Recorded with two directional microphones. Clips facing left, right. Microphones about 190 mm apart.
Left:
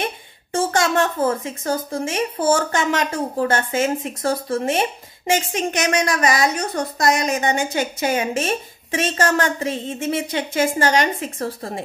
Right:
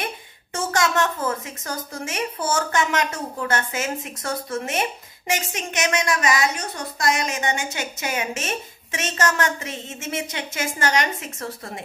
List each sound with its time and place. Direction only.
0.0 s a woman's voice: 30° left (ahead or behind)